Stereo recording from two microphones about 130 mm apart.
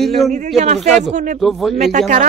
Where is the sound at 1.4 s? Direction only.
Centre (ahead or behind).